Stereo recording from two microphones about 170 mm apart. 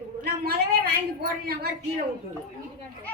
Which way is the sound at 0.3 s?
70° right (ahead or behind).